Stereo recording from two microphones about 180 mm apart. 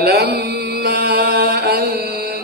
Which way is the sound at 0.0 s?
60° right (ahead or behind).